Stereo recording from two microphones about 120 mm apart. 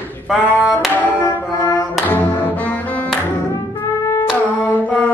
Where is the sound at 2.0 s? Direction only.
15° left (ahead or behind).